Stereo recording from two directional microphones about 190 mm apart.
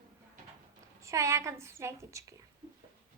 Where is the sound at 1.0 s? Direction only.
15° right (ahead or behind).